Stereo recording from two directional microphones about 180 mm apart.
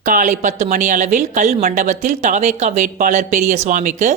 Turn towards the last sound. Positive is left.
turn(degrees=-45)  # may be behind; listen again after turning